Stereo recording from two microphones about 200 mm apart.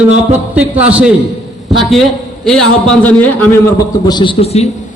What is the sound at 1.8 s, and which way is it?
Speech, centre (ahead or behind).